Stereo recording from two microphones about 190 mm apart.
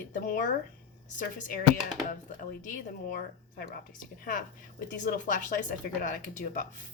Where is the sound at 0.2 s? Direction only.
45° left (ahead or behind).